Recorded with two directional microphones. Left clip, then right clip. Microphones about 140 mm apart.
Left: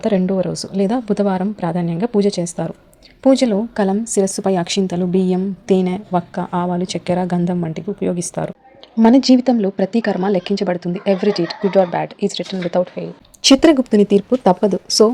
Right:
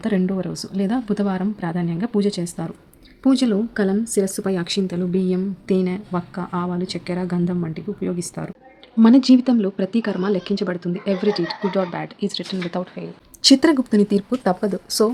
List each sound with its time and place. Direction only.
0.0 s speech: 20° left (ahead or behind)
9.0 s speech: 15° left (ahead or behind)